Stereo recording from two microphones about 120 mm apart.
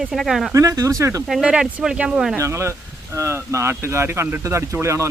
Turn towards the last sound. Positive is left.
turn(degrees=-25)  # may be behind; listen again after turning